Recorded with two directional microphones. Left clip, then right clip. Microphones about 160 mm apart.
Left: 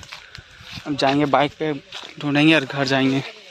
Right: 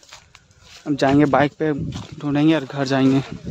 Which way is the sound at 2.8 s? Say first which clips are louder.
Right 1 dB; 25° right (ahead or behind).